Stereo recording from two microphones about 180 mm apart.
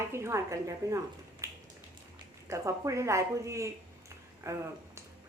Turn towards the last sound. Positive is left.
turn(degrees=-15)  # may be behind; listen again after turning